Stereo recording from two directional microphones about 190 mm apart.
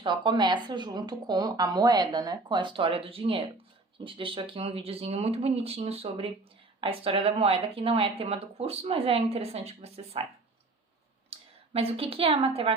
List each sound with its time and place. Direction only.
0.0 s a woman's voice: 25° right (ahead or behind)
11.3 s speech: 30° right (ahead or behind)